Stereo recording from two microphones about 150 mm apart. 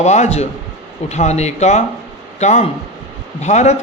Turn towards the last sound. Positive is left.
turn(degrees=50)  # may be behind; listen again after turning